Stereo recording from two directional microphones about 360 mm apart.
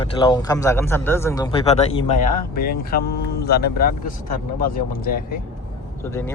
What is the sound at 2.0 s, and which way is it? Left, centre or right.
Speech, left.